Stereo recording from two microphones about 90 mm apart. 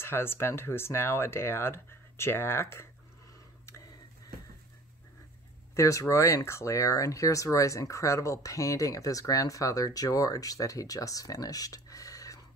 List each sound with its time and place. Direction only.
0.0 s speech: 25° left (ahead or behind)
5.8 s speech: 35° left (ahead or behind)